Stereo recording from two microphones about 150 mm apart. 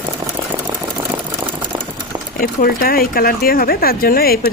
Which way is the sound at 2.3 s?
75° left (ahead or behind).